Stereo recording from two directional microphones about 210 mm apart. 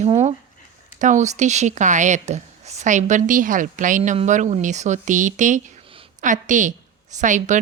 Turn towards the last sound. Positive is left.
turn(degrees=-35)  # may be behind; listen again after turning